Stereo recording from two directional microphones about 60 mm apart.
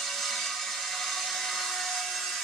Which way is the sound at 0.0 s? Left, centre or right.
Centre.